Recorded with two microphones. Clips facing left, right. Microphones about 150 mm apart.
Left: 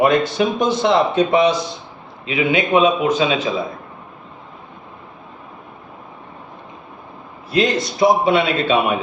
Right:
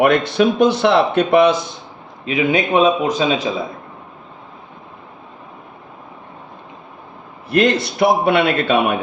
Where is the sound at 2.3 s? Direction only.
40° right (ahead or behind).